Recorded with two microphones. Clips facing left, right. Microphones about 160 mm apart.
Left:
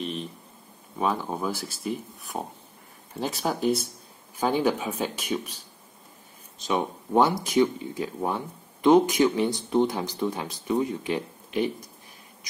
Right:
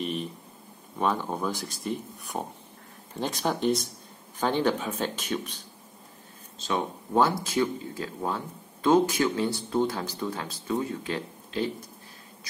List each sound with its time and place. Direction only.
0.0 s a sound: 5° right (ahead or behind)
0.9 s speech: 5° left (ahead or behind)
6.6 s speech: 15° left (ahead or behind)